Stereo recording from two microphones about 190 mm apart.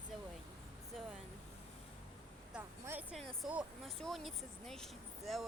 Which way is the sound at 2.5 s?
10° right (ahead or behind).